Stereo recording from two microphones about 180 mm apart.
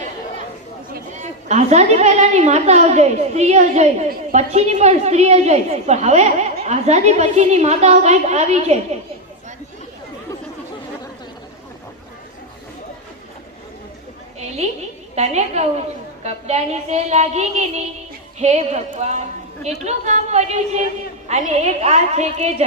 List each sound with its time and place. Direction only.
1.1 s a woman's voice: 40° right (ahead or behind)
14.3 s a sound: 35° right (ahead or behind)
15.1 s a woman's voice: 40° right (ahead or behind)